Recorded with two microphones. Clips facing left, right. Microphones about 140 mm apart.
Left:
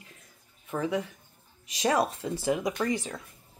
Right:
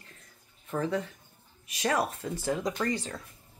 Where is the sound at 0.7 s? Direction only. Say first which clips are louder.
Left 1 dB; 10° left (ahead or behind).